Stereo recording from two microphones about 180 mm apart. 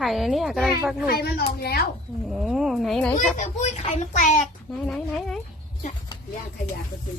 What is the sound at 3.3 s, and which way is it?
A child's voice, 40° left (ahead or behind).